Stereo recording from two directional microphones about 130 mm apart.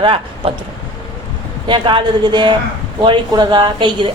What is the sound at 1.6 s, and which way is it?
A man's voice, 40° right (ahead or behind).